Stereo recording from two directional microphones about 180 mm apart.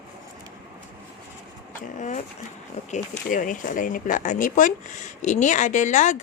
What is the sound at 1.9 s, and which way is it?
Speech, 40° left (ahead or behind).